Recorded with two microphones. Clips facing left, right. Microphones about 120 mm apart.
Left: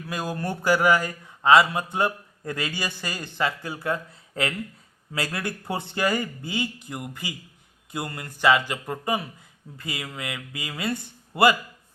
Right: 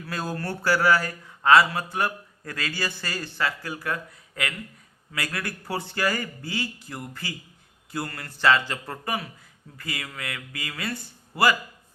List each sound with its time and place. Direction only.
0.1 s speech: 15° left (ahead or behind)